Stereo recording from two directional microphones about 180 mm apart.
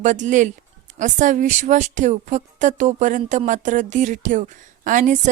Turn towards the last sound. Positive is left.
turn(degrees=-45)  # may be behind; listen again after turning